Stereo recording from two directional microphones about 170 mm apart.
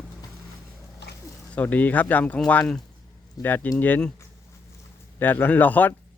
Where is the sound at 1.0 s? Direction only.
90° left.